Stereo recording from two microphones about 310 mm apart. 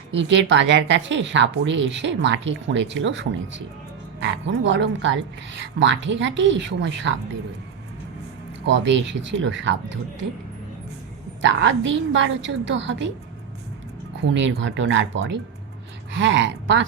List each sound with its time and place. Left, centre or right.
0.1 s speech: right
8.6 s speech: right
11.4 s speech: right
14.3 s speech: right